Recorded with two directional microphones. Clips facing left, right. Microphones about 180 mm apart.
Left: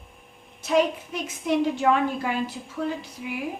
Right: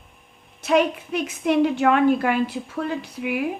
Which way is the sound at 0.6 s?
65° right (ahead or behind).